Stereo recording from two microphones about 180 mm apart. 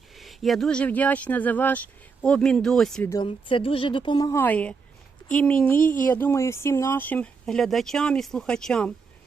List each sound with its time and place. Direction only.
0.2 s speech: centre (ahead or behind)
3.1 s speech: 25° left (ahead or behind); by 8.9 s 5° left (ahead or behind)